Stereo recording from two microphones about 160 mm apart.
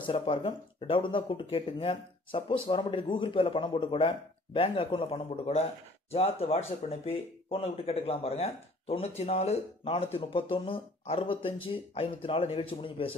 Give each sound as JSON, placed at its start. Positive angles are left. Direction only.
{"t": 0.0, "sound": "speech", "side_deg": 35}